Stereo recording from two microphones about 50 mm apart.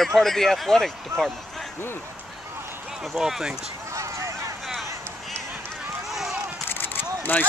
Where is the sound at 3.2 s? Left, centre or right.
Centre.